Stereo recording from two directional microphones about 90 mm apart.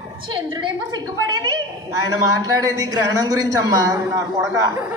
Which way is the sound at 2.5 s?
40° right (ahead or behind).